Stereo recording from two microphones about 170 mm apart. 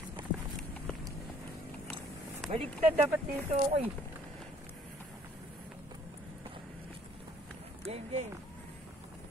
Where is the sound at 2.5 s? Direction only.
35° right (ahead or behind).